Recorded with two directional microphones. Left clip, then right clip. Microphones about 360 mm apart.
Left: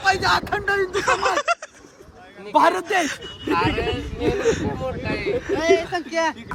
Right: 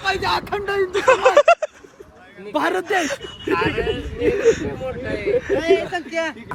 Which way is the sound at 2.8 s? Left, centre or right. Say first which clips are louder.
Right 1 dB; centre.